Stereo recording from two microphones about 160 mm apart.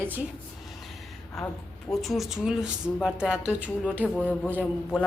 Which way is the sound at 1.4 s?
Centre (ahead or behind).